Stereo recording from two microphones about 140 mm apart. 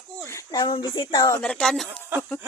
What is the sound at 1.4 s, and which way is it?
Speech, 10° left (ahead or behind).